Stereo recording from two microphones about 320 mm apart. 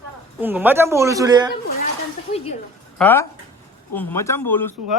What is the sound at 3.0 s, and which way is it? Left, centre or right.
Speech, centre.